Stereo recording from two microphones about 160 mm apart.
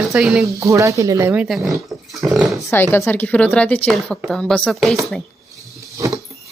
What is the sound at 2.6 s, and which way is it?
Speech, 15° left (ahead or behind).